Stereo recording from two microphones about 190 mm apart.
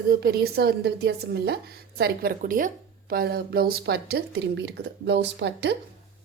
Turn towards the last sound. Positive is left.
turn(degrees=-65)  # may be behind; listen again after turning